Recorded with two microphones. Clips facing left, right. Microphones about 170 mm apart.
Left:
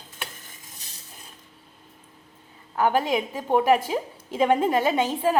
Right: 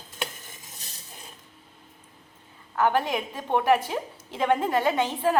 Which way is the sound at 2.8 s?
15° left (ahead or behind).